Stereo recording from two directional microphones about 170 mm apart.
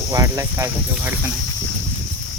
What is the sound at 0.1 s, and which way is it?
Speech, 20° right (ahead or behind).